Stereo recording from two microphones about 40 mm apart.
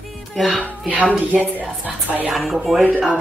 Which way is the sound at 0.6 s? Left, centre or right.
Right.